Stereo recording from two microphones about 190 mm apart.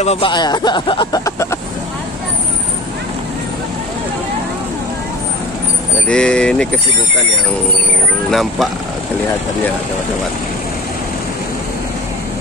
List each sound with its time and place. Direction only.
0.0 s speech: 35° left (ahead or behind)
0.3 s speech: 20° left (ahead or behind)
6.0 s speech: 5° left (ahead or behind)
8.3 s speech: centre (ahead or behind)